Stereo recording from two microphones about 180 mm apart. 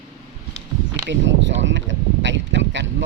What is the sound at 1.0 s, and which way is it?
Speech, 90° right.